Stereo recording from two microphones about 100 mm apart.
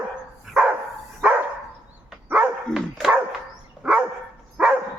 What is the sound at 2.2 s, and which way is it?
Dog, 15° right (ahead or behind).